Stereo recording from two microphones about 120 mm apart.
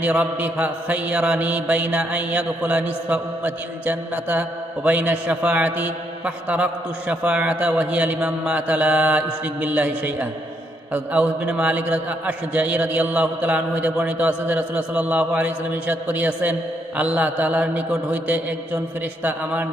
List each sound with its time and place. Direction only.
0.0 s mantra: 10° right (ahead or behind)